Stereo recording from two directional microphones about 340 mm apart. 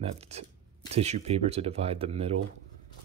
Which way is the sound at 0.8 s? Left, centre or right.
Centre.